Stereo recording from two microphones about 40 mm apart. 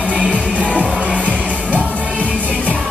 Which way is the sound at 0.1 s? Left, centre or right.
Right.